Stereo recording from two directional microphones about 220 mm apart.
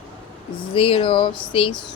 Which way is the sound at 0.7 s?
25° left (ahead or behind).